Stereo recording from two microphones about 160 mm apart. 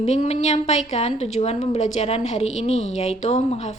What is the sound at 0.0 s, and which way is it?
A woman's voice, 40° left (ahead or behind).